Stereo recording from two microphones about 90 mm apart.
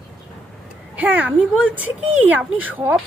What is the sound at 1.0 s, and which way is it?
Speech, 20° right (ahead or behind).